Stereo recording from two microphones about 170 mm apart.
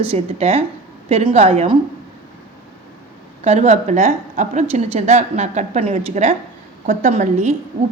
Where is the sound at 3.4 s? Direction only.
40° right (ahead or behind).